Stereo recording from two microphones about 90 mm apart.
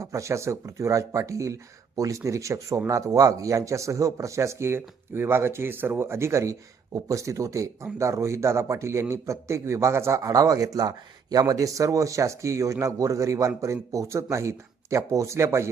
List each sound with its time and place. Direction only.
0.0 s a man's voice: 35° right (ahead or behind)